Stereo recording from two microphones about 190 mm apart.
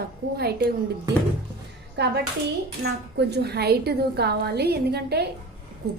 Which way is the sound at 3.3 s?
60° right (ahead or behind).